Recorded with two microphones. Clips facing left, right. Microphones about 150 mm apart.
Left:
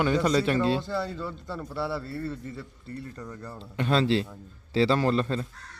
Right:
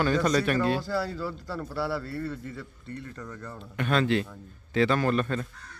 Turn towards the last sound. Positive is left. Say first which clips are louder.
# left 1 dB
turn(degrees=25)  # may be behind; listen again after turning